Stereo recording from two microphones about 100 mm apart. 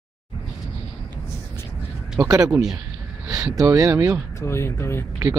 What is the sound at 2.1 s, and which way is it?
Speech, 35° right (ahead or behind).